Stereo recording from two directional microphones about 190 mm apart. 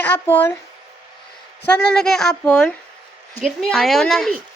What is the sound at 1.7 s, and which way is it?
Speech, 5° left (ahead or behind).